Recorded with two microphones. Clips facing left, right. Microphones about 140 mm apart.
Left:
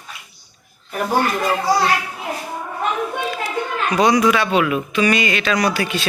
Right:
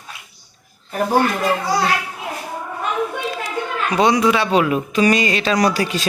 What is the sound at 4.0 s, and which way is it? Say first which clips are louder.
Speech: even; 25° right (ahead or behind).